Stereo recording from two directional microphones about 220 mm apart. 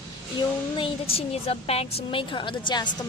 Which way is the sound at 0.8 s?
25° left (ahead or behind).